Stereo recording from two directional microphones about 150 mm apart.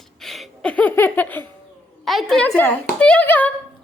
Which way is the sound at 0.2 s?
Centre (ahead or behind).